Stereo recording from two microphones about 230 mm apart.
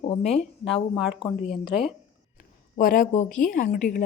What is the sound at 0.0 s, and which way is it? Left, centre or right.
Speech, left.